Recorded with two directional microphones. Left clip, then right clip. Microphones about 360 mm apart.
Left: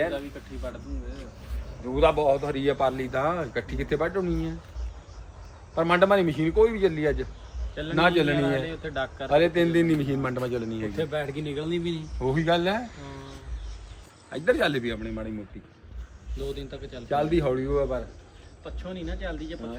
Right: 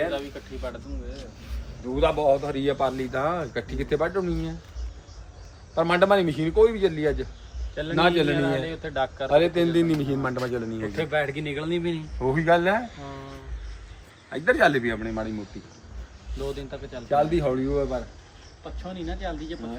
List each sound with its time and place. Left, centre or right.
1.9 s a man's voice: centre
5.7 s a man's voice: centre
8.6 s speech: right
9.3 s a man's voice: centre
10.8 s speech: right
12.2 s a man's voice: centre
14.3 s a man's voice: centre
16.6 s a man's voice: centre
17.1 s a man's voice: centre